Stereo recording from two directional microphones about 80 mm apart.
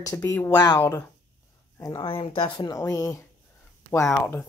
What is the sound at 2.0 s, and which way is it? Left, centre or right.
Speech, left.